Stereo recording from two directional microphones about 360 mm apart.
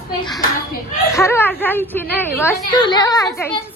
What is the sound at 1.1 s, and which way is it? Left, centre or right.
A woman's voice, centre.